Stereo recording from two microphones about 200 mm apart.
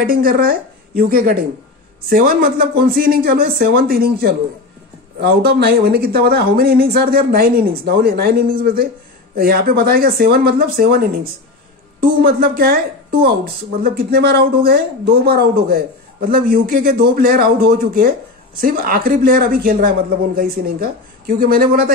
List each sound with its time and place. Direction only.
0.0 s speech: 45° right (ahead or behind)